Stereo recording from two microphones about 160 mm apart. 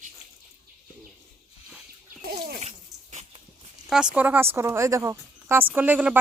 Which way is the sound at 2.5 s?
45° right (ahead or behind).